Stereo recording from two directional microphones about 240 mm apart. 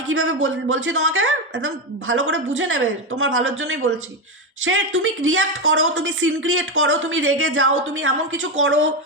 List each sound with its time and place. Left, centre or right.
0.1 s speech: right